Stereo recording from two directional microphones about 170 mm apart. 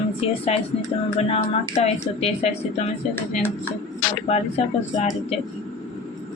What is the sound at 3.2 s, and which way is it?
Speech, 10° left (ahead or behind).